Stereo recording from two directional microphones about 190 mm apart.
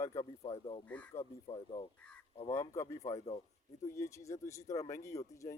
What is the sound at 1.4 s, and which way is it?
Speech, 30° left (ahead or behind).